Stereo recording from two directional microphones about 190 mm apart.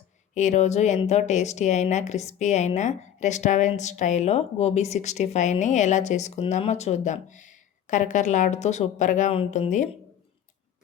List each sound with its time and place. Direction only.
0.3 s speech: 40° left (ahead or behind)